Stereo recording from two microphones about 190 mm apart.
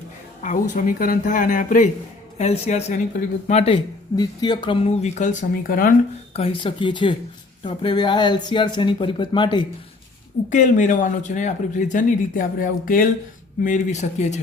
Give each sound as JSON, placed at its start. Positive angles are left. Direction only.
{"t": 0.4, "sound": "speech", "side_deg": 40}
{"t": 4.2, "sound": "speech", "side_deg": 20}
{"t": 6.3, "sound": "speech", "side_deg": 30}
{"t": 10.5, "sound": "speech", "side_deg": 40}